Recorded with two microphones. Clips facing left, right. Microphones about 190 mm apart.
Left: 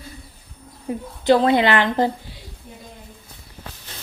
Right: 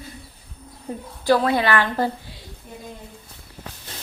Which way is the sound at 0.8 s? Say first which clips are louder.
Left 3 dB; 20° left (ahead or behind).